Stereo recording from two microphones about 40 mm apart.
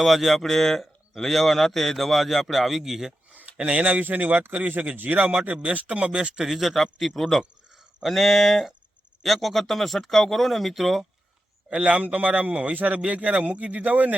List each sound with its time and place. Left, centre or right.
0.0 s a man's voice: centre
3.3 s a man's voice: right
6.1 s speech: centre
6.4 s a man's voice: centre
11.7 s a man's voice: right